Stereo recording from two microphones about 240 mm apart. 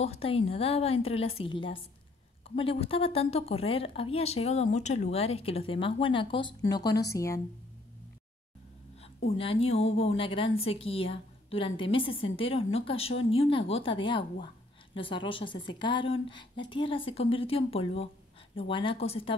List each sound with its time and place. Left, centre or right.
0.0 s a woman's voice: left
9.0 s a woman's voice: left